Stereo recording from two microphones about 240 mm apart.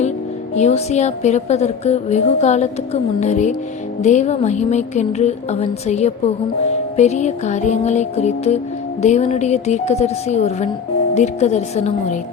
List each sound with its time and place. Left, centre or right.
0.5 s speech: left